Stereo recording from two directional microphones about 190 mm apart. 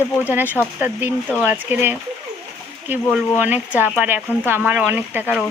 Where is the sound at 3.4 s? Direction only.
10° right (ahead or behind).